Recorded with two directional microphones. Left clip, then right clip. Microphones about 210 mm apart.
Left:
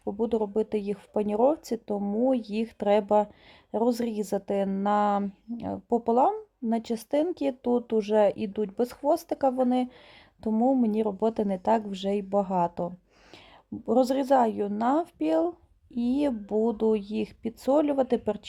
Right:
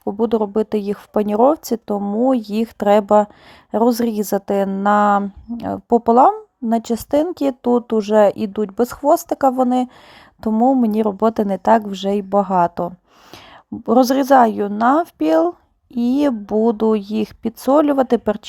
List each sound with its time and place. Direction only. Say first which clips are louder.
0.2 s a woman's voice: right 9 dB; 15° right (ahead or behind)